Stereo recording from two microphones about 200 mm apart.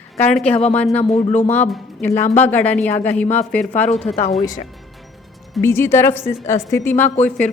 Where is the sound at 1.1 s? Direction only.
35° left (ahead or behind).